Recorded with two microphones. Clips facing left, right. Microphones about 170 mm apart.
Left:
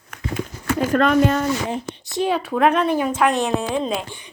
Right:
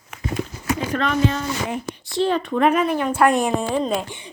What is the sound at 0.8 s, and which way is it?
Speech, 50° left (ahead or behind).